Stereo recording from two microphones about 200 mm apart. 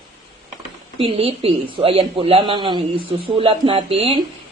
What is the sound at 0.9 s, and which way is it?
Speech, 25° right (ahead or behind).